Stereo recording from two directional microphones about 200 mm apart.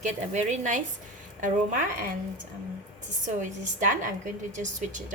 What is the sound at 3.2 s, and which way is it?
A woman's voice, 40° right (ahead or behind).